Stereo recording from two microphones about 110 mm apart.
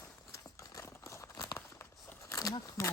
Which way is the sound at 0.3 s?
30° left (ahead or behind).